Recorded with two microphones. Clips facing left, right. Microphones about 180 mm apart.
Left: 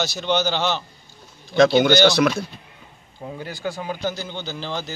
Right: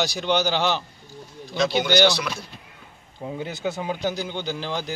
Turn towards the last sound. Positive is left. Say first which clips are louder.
# right 1 dB
turn(degrees=-10)  # may be behind; listen again after turning